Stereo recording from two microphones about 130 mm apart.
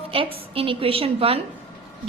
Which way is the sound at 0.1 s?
45° right (ahead or behind).